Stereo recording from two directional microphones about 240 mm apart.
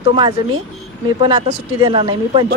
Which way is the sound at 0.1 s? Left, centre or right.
Centre.